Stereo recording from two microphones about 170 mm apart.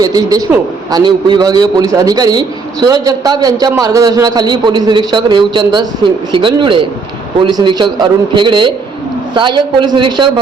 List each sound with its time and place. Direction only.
0.0 s a man's voice: 20° right (ahead or behind)